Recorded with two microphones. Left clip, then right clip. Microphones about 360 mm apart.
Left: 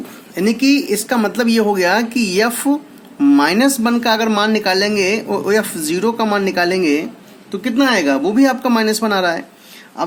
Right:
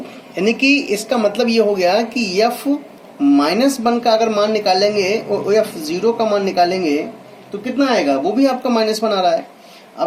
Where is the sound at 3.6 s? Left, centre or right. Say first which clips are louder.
Even; left.